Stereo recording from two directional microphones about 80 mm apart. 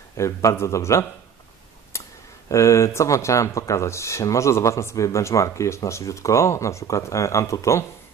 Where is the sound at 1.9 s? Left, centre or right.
Left.